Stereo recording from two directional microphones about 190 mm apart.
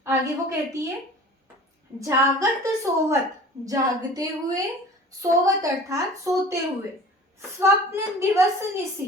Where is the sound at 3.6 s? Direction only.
20° right (ahead or behind).